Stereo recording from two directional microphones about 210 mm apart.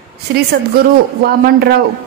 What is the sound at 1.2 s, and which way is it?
Speech, 45° right (ahead or behind).